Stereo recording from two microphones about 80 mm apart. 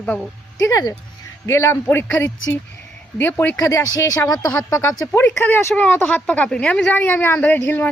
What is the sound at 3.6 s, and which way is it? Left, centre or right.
Speech, left.